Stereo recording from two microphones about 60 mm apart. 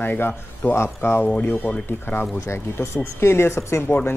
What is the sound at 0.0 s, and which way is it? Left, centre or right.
Speech, left.